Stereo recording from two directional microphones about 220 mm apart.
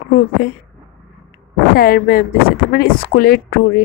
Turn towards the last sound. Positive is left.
turn(degrees=45)  # may be behind; listen again after turning